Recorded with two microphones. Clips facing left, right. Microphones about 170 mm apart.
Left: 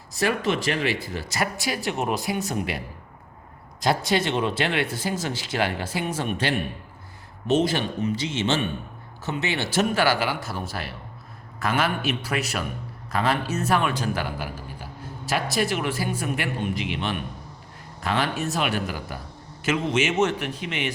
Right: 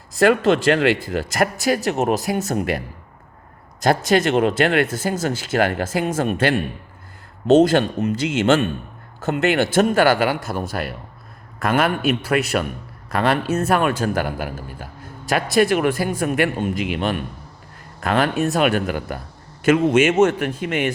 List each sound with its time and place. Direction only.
0.3 s speech: 90° right
1.4 s speech: 45° right (ahead or behind)
7.8 s a man's voice: 60° right (ahead or behind)
9.6 s a man's voice: 50° right (ahead or behind)